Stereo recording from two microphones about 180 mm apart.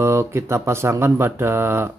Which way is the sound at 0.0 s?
15° right (ahead or behind).